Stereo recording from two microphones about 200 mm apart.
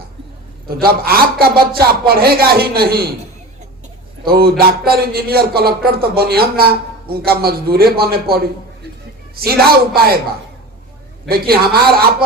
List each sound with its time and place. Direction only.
0.7 s speech: 50° right (ahead or behind)
4.3 s speech: 50° right (ahead or behind)
11.3 s speech: 50° right (ahead or behind)